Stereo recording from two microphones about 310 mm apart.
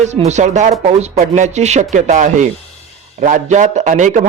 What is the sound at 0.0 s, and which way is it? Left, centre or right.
A man's voice, right.